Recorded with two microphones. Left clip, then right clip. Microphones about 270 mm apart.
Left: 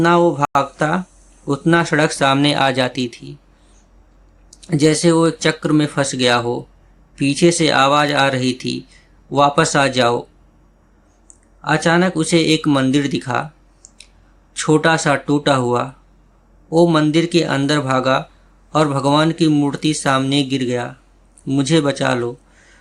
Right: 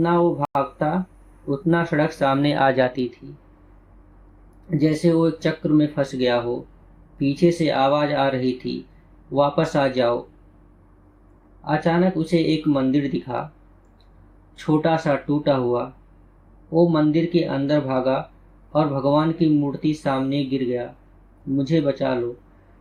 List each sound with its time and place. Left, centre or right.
0.0 s speech: left
4.8 s speech: left
11.6 s speech: left
14.5 s speech: left